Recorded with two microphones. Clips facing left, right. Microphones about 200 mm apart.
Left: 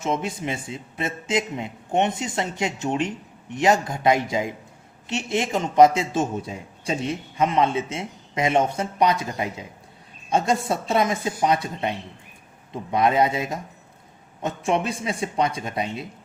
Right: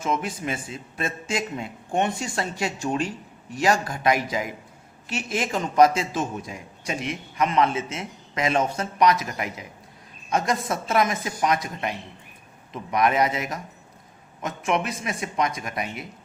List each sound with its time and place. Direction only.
0.0 s a man's voice: 25° left (ahead or behind)